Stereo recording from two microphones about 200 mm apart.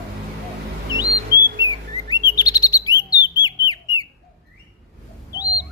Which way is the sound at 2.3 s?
20° left (ahead or behind).